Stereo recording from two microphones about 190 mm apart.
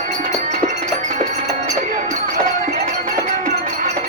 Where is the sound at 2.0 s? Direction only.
40° right (ahead or behind).